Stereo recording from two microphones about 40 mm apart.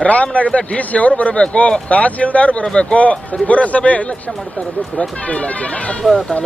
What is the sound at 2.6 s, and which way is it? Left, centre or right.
Speech, left.